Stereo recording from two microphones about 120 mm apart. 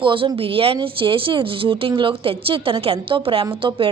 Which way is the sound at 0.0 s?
45° right (ahead or behind).